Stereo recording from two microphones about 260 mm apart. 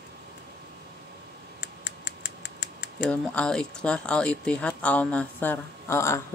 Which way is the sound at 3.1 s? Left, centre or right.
Centre.